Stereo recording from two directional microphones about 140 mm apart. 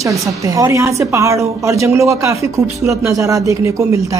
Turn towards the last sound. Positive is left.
turn(degrees=-20)  # may be behind; listen again after turning